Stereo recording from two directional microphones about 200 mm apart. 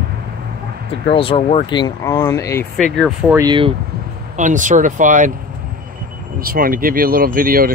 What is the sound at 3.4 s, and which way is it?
Speech, 25° right (ahead or behind).